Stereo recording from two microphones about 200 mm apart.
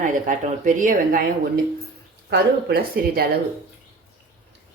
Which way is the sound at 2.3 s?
55° right (ahead or behind).